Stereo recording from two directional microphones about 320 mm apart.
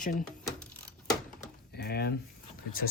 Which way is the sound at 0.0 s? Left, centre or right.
Left.